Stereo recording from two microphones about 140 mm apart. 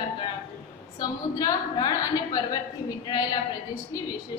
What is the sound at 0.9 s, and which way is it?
A woman's voice, 30° left (ahead or behind).